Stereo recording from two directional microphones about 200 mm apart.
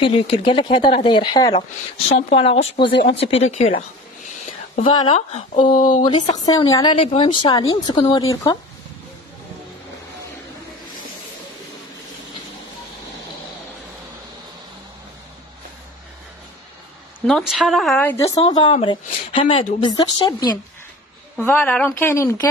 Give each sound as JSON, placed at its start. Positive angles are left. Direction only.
{"t": 0.0, "sound": "a woman's voice", "side_deg": 25}
{"t": 4.8, "sound": "speech", "side_deg": 25}
{"t": 6.0, "sound": "a woman's voice", "side_deg": 20}
{"t": 17.3, "sound": "speech", "side_deg": 0}
{"t": 18.3, "sound": "a woman's voice", "side_deg": 25}
{"t": 21.4, "sound": "speech", "side_deg": 10}